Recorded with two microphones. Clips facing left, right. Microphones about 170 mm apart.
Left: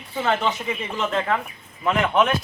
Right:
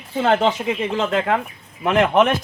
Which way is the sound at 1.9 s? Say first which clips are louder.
Right 4 dB; 65° right (ahead or behind).